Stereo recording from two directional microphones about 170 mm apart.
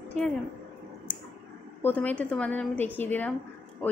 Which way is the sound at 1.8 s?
10° left (ahead or behind).